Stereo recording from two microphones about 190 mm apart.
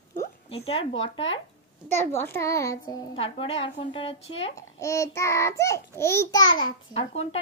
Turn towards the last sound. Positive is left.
turn(degrees=30)  # may be behind; listen again after turning